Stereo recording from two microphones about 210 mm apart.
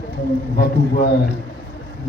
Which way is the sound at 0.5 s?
50° left (ahead or behind).